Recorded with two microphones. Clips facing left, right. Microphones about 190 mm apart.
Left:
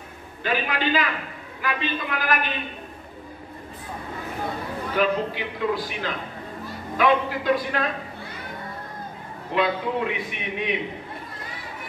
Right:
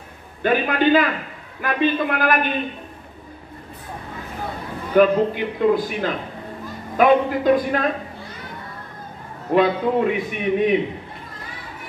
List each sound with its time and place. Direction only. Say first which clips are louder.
0.4 s a man's voice: right 7 dB; 50° right (ahead or behind)
4.9 s a man's voice: right 8 dB; 50° right (ahead or behind)
9.5 s a man's voice: right 6 dB; 45° right (ahead or behind)